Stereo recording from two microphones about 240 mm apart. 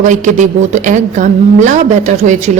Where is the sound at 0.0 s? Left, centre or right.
Right.